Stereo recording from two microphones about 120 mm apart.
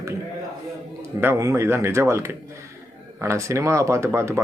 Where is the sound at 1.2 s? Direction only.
25° right (ahead or behind).